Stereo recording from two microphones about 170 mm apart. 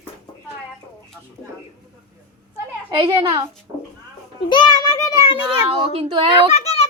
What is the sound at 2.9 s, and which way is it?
Speech, 30° right (ahead or behind).